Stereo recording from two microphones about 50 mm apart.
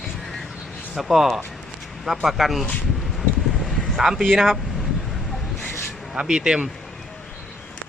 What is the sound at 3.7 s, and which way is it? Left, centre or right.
Vehicle, centre.